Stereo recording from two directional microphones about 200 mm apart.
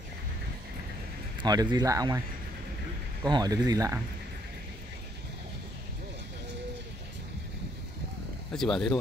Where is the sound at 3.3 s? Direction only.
20° right (ahead or behind).